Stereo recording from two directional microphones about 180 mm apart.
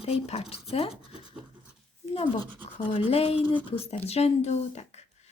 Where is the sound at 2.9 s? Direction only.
30° left (ahead or behind).